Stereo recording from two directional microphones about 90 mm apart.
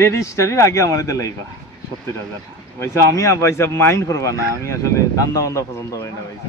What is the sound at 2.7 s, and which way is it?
Speech, 35° left (ahead or behind).